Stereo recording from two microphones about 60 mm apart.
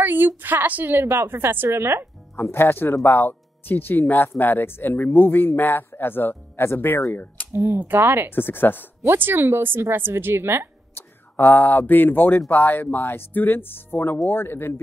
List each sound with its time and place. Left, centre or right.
0.0 s a sound: right
0.4 s a woman's voice: right
2.3 s speech: left
7.5 s speech: right
7.8 s a woman's voice: right
8.3 s speech: left
9.0 s a woman's voice: right
11.0 s speech: left